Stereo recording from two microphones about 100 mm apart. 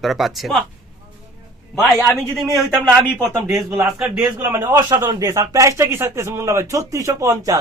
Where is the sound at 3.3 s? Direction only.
25° right (ahead or behind).